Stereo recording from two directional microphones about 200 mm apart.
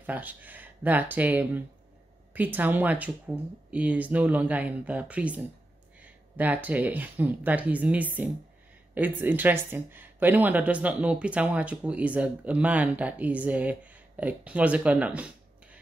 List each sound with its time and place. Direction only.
0.0 s speech: 10° right (ahead or behind)